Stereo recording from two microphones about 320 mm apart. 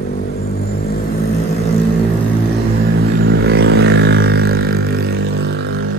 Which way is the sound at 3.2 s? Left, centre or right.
Right.